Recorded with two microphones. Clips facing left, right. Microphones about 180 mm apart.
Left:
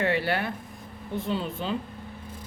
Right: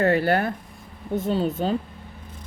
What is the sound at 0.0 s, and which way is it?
Speech, 45° right (ahead or behind).